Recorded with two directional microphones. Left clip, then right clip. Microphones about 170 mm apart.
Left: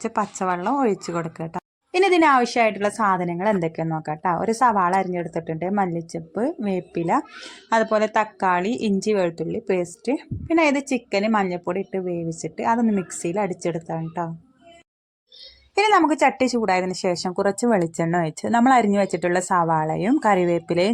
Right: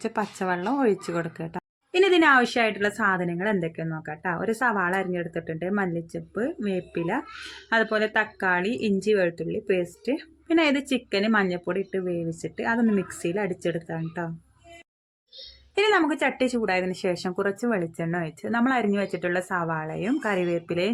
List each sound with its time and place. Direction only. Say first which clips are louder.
0.0 s speech: left 4 dB; 10° left (ahead or behind)
15.7 s speech: left 4 dB; 20° left (ahead or behind)